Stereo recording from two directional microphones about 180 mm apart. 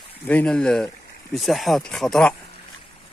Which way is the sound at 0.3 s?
5° left (ahead or behind).